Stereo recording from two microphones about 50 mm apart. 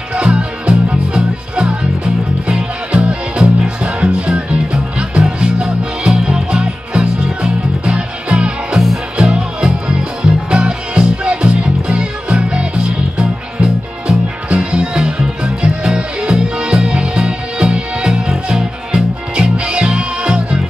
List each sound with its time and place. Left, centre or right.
0.1 s music: right